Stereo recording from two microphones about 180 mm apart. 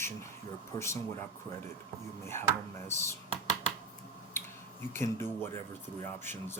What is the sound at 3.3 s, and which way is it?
Computer keyboard, 35° right (ahead or behind).